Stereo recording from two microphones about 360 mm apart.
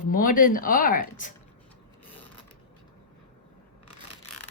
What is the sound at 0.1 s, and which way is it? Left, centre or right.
Speech, left.